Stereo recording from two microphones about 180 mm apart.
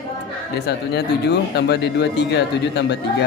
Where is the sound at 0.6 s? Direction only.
65° left (ahead or behind).